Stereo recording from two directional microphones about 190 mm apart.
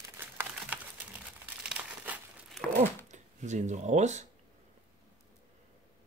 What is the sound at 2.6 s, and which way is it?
Cash register, 40° right (ahead or behind).